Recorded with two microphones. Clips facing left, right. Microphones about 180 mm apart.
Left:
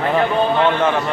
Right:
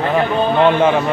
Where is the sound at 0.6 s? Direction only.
15° right (ahead or behind).